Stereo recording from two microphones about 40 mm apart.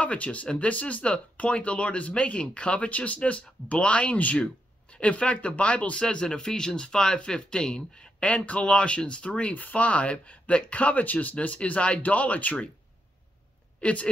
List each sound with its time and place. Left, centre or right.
0.0 s speech: left
6.0 s speech: centre
8.2 s speech: left
13.7 s speech: left